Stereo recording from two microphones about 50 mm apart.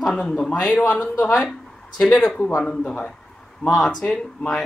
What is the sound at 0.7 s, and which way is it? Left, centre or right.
Speech, left.